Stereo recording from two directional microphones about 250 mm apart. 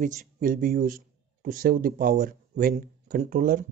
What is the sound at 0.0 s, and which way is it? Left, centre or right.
A man's voice, right.